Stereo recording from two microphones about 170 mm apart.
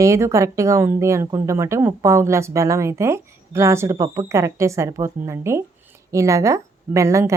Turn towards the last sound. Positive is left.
turn(degrees=-15)  # may be behind; listen again after turning